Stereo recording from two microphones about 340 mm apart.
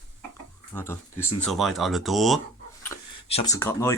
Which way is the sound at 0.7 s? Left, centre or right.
Centre.